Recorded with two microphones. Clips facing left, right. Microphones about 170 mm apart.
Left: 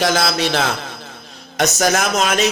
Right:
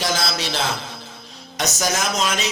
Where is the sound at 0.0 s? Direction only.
60° left (ahead or behind).